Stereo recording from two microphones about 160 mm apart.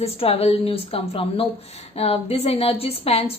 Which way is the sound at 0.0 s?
40° left (ahead or behind).